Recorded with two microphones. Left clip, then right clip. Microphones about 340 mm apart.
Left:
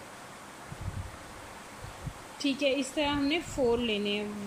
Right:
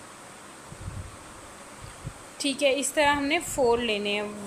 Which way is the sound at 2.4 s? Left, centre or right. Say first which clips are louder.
Right 4 dB; centre.